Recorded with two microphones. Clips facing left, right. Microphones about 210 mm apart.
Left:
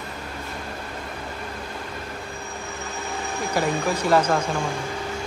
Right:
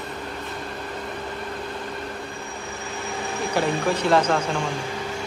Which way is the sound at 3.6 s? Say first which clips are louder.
Right 1 dB; 10° left (ahead or behind).